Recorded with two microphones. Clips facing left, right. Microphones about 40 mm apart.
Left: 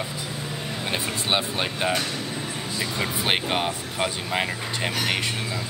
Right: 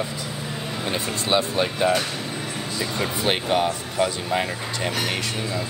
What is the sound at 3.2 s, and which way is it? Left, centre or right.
Speech, left.